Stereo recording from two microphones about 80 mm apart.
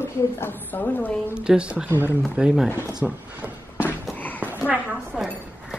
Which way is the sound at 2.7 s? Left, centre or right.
Left.